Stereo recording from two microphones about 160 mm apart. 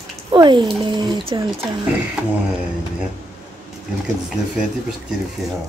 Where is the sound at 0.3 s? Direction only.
30° right (ahead or behind).